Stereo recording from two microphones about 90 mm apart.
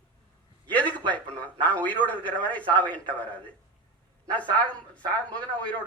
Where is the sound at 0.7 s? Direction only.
15° left (ahead or behind).